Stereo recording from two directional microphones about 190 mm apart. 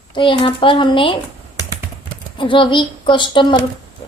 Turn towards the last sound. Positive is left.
turn(degrees=25)  # may be behind; listen again after turning